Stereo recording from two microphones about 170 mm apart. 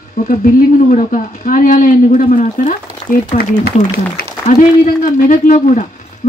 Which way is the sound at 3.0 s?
35° left (ahead or behind).